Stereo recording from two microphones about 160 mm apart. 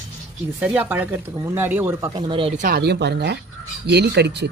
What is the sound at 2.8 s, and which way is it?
Speech, 90° right.